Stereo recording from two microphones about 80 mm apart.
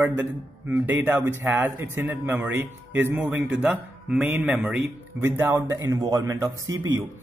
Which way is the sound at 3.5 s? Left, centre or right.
Centre.